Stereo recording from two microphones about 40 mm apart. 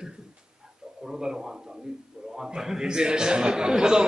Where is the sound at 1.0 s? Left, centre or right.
Centre.